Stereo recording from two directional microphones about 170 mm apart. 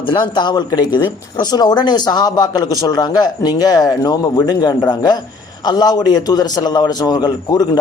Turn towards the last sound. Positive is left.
turn(degrees=25)  # may be behind; listen again after turning